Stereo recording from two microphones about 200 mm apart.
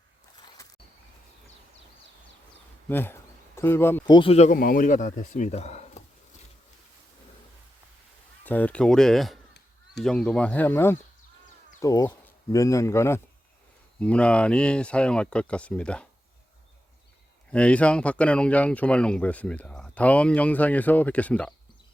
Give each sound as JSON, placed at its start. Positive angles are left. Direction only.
{"t": 0.4, "sound": "walk", "side_deg": 15}
{"t": 2.9, "sound": "speech", "side_deg": 10}
{"t": 4.0, "sound": "speech", "side_deg": 25}
{"t": 8.4, "sound": "speech", "side_deg": 10}
{"t": 17.5, "sound": "speech", "side_deg": 5}